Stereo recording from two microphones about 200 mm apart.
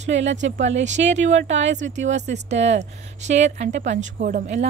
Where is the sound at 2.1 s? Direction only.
35° right (ahead or behind).